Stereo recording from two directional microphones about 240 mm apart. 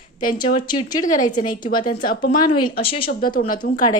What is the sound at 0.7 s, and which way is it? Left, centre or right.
Speech, centre.